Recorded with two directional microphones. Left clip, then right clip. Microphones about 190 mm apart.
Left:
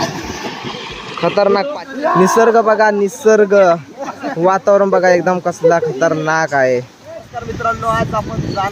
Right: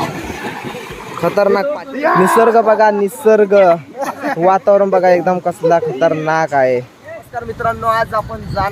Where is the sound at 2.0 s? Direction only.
55° right (ahead or behind).